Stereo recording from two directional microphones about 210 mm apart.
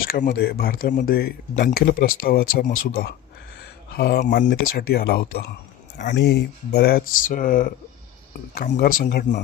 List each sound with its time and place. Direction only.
0.1 s speech: 40° left (ahead or behind)
4.2 s speech: 35° left (ahead or behind)
4.4 s speech: 50° left (ahead or behind)